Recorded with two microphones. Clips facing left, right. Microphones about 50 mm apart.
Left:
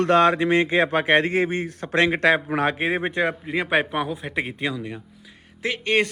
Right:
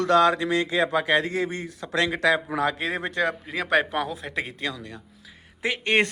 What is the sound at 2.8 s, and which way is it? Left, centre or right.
Speech, left.